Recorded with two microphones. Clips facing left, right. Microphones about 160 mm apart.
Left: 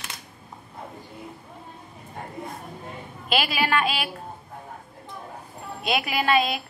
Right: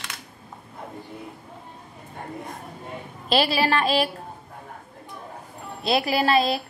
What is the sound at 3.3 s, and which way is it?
Speech, 35° right (ahead or behind).